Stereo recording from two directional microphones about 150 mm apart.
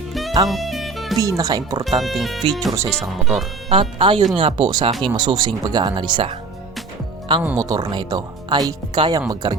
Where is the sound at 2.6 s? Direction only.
20° right (ahead or behind).